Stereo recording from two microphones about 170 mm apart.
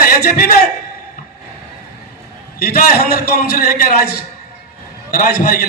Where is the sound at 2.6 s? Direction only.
65° left (ahead or behind).